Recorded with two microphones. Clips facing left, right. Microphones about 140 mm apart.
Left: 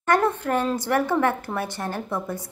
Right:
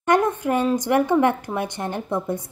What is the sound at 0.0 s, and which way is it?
A woman's voice, 15° right (ahead or behind).